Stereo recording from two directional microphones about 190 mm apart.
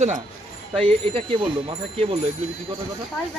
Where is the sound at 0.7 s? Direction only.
25° right (ahead or behind).